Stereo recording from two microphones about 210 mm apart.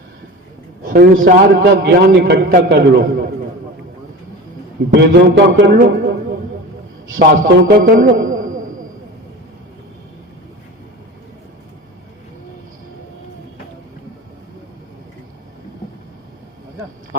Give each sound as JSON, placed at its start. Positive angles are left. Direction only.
{"t": 0.9, "sound": "a man's voice", "side_deg": -45}
{"t": 4.9, "sound": "a man's voice", "side_deg": -55}
{"t": 7.2, "sound": "a man's voice", "side_deg": -45}